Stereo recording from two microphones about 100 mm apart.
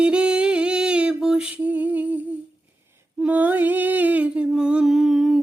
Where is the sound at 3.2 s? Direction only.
15° right (ahead or behind).